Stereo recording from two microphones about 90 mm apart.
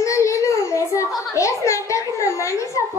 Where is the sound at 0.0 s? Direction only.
35° left (ahead or behind).